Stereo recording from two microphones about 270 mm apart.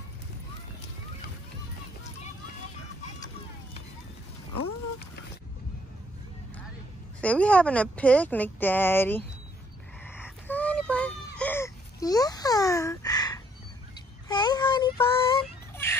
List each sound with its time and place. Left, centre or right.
7.2 s speech: centre
10.4 s baby cry: centre
14.2 s a sound: centre